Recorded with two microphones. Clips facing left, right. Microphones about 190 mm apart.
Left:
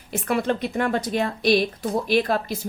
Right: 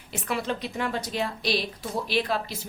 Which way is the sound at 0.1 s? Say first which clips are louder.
Left 6 dB; 50° left (ahead or behind).